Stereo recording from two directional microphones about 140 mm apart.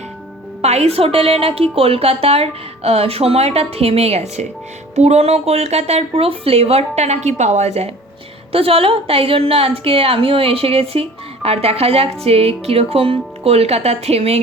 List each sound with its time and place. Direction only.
0.6 s a woman's voice: 50° right (ahead or behind)